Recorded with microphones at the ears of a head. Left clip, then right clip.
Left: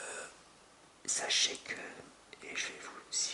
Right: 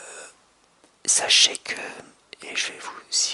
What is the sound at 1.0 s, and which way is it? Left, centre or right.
Speech, right.